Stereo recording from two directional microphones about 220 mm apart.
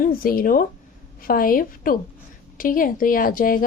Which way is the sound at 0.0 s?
40° left (ahead or behind).